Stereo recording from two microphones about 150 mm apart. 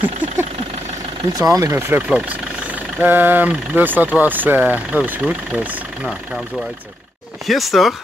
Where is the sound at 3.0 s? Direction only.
15° right (ahead or behind).